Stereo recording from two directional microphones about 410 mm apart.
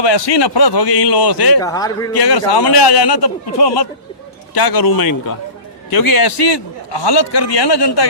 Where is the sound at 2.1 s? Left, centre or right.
Left.